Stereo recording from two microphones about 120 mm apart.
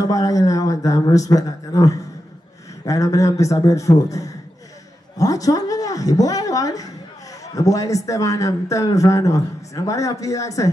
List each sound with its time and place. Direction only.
0.0 s a man's voice: 30° left (ahead or behind)